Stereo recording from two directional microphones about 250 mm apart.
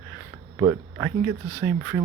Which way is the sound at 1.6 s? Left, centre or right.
Right.